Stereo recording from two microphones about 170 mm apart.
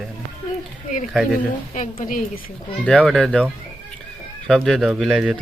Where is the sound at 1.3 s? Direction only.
45° left (ahead or behind).